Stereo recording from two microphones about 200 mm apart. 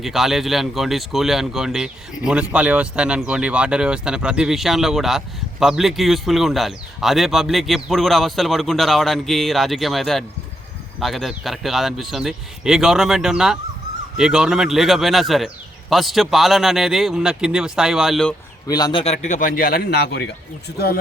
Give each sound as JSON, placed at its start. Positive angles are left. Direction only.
{"t": 0.0, "sound": "speech", "side_deg": 0}
{"t": 18.7, "sound": "a man's voice", "side_deg": 20}